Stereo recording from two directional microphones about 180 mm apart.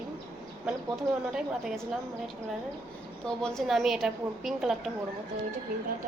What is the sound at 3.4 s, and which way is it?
A woman's voice, centre (ahead or behind).